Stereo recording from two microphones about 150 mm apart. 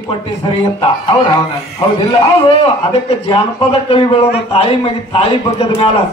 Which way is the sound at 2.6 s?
40° left (ahead or behind).